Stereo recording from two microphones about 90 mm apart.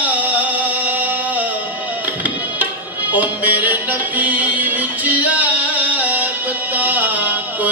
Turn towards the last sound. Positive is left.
turn(degrees=-20)  # may be behind; listen again after turning